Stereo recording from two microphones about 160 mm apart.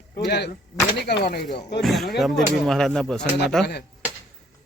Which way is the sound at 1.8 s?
Centre (ahead or behind).